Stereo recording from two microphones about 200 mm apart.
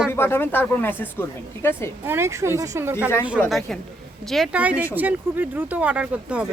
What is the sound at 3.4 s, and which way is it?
A woman's voice, centre (ahead or behind).